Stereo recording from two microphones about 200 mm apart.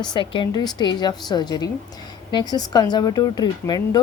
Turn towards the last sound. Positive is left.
turn(degrees=20)  # may be behind; listen again after turning